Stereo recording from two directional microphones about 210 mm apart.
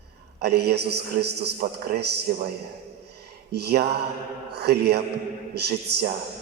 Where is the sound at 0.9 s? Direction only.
90° right.